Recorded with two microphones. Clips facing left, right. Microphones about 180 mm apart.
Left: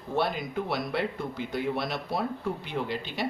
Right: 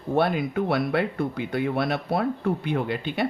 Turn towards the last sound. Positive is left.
turn(degrees=-55)  # may be behind; listen again after turning